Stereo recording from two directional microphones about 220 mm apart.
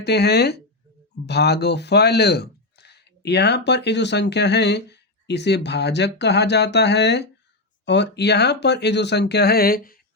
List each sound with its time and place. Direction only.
0.0 s speech: 50° left (ahead or behind)